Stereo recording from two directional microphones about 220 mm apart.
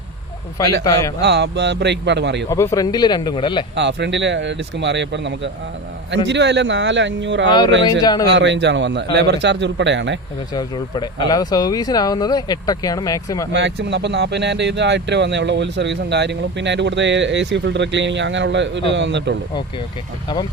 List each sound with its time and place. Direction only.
1.2 s speech: 50° right (ahead or behind)
2.5 s speech: 10° left (ahead or behind)
3.8 s speech: 50° right (ahead or behind)
8.0 s speech: 20° left (ahead or behind)
8.3 s speech: 50° right (ahead or behind)
10.5 s speech: 20° left (ahead or behind)
13.5 s speech: 50° right (ahead or behind)